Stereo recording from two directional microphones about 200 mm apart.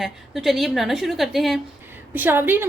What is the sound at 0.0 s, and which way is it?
A woman's voice, centre (ahead or behind).